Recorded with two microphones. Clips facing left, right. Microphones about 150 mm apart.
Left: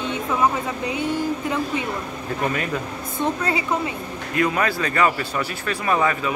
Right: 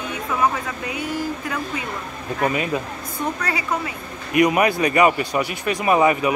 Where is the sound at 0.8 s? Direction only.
25° left (ahead or behind).